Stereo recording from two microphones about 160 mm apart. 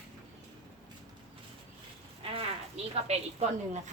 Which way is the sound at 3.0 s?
45° right (ahead or behind).